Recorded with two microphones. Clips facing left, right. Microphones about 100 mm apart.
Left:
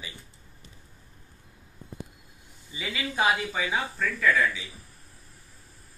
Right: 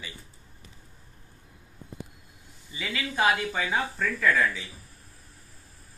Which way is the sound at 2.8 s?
20° left (ahead or behind).